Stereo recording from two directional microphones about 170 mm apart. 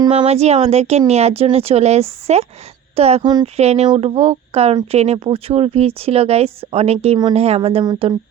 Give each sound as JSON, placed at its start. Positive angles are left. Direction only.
{"t": 0.2, "sound": "a woman's voice", "side_deg": -40}